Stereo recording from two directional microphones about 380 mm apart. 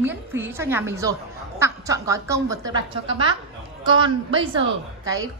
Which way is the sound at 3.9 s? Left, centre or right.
Centre.